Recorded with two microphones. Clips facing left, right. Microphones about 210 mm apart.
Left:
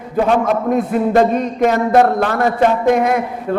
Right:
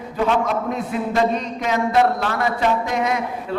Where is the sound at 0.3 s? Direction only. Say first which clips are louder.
Left 5 dB; 50° left (ahead or behind).